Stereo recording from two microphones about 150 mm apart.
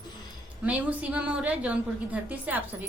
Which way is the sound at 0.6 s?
10° right (ahead or behind).